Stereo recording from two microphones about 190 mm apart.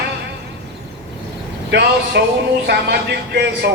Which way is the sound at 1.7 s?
60° right (ahead or behind).